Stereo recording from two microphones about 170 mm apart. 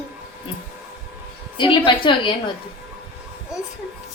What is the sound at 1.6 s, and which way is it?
Speech, 30° left (ahead or behind).